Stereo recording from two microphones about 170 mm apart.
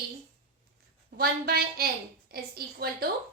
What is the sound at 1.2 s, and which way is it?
A woman's voice, 65° right (ahead or behind).